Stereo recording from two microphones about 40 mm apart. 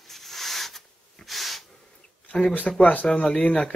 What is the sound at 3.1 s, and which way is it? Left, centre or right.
Speech, left.